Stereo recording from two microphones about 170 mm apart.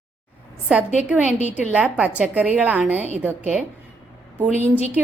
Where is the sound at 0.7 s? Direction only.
5° right (ahead or behind).